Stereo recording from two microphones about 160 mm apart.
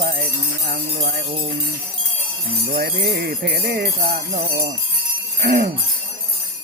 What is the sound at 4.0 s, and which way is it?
Jingle bell, 60° right (ahead or behind).